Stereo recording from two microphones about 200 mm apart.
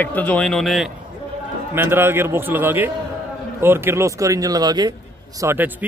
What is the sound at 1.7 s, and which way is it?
A man's voice, 10° right (ahead or behind).